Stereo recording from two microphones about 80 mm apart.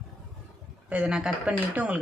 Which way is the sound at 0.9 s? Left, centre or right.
Centre.